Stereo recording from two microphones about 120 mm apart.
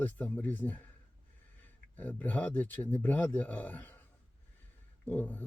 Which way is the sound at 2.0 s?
15° left (ahead or behind).